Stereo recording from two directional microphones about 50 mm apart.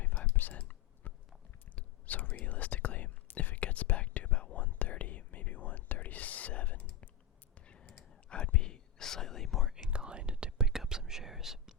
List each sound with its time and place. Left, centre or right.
0.0 s whispering: left
7.5 s computer keyboard: left
8.3 s whispering: left
8.7 s whispering: centre
9.6 s whispering: centre